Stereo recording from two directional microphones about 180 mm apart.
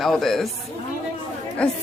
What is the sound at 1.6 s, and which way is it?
Speech, 5° left (ahead or behind).